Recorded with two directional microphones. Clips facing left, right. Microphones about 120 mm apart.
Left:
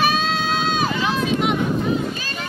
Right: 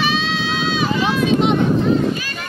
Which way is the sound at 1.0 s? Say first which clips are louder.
Right 4 dB; 25° right (ahead or behind).